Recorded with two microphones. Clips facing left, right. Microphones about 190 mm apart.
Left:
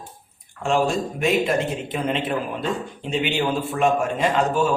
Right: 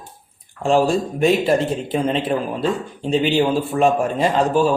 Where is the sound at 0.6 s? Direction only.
35° right (ahead or behind).